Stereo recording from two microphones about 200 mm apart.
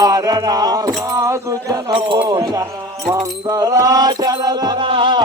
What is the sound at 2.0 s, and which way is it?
Mantra, 25° right (ahead or behind).